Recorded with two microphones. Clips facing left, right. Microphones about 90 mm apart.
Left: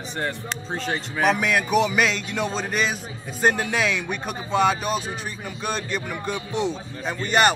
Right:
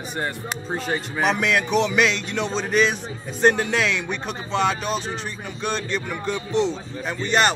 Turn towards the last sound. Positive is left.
turn(degrees=5)  # may be behind; listen again after turning